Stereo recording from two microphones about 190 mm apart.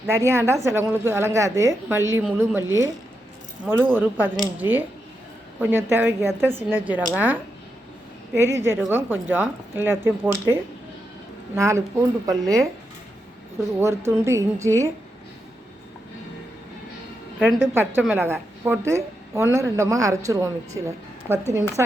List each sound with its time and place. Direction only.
0.3 s a woman's voice: 15° right (ahead or behind)
13.7 s a woman's voice: 15° right (ahead or behind)
18.0 s a woman's voice: 10° right (ahead or behind)